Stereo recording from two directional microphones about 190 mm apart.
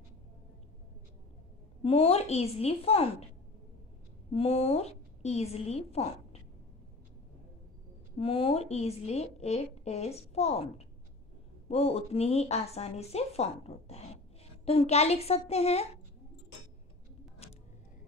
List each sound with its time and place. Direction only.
1.8 s a woman's voice: 30° left (ahead or behind)
4.3 s a woman's voice: 30° left (ahead or behind)
8.2 s a woman's voice: 30° left (ahead or behind)
11.7 s a woman's voice: 30° left (ahead or behind)
17.4 s music: 35° left (ahead or behind)